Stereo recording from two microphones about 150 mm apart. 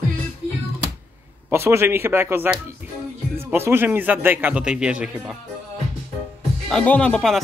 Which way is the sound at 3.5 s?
15° right (ahead or behind).